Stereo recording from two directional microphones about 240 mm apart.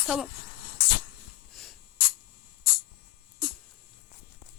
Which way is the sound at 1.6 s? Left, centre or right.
Centre.